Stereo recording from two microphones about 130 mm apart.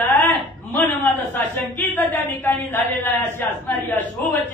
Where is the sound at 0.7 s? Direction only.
15° left (ahead or behind).